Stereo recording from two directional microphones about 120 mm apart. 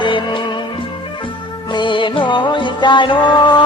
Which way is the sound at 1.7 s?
40° left (ahead or behind).